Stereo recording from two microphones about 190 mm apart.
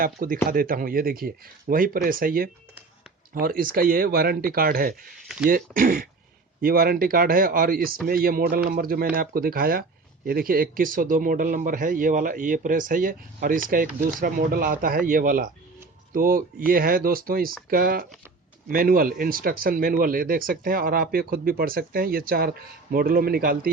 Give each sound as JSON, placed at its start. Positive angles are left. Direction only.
{"t": 0.0, "sound": "speech", "side_deg": -45}